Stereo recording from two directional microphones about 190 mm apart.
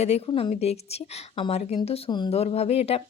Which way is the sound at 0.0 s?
30° left (ahead or behind).